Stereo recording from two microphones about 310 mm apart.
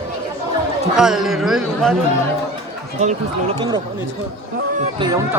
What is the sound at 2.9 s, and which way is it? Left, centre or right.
Speech, centre.